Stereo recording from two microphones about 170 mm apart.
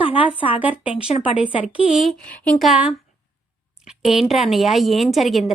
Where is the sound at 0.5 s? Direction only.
10° right (ahead or behind).